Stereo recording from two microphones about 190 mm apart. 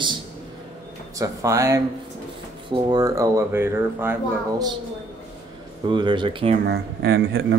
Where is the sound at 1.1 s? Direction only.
15° right (ahead or behind).